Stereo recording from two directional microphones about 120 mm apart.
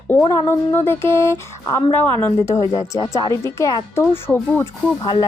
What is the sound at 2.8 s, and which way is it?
Speech, 40° left (ahead or behind).